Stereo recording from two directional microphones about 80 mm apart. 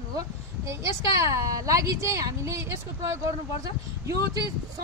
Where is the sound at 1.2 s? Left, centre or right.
Right.